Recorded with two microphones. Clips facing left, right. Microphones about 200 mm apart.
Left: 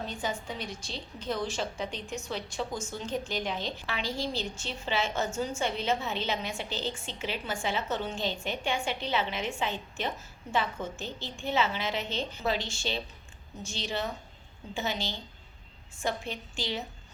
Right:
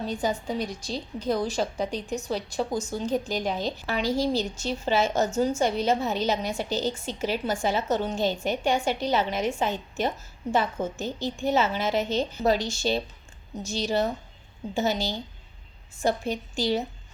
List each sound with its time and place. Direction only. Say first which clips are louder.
0.1 s a woman's voice: right 7 dB; 40° right (ahead or behind)